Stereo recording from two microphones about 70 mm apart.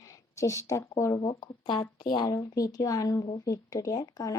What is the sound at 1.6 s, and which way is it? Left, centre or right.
Speech, left.